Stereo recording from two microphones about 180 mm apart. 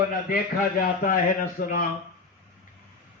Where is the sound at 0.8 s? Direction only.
50° left (ahead or behind).